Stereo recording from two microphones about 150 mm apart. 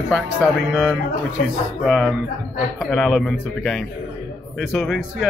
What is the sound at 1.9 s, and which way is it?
Speech, centre (ahead or behind).